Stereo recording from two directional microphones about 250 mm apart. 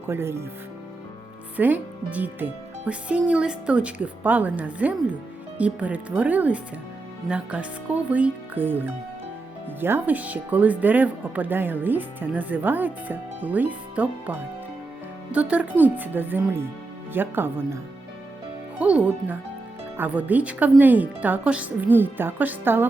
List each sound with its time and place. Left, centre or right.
0.1 s speech: centre
1.5 s a woman's voice: centre
18.8 s a woman's voice: centre